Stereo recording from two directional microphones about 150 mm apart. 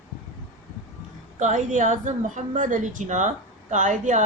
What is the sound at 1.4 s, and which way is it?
Speech, 55° right (ahead or behind).